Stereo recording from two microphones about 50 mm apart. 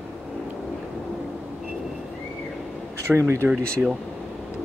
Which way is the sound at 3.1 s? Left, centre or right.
Right.